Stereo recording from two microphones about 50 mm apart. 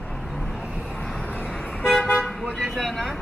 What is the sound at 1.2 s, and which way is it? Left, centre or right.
Toot, left.